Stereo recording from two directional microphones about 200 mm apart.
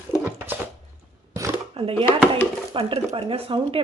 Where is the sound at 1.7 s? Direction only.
25° right (ahead or behind).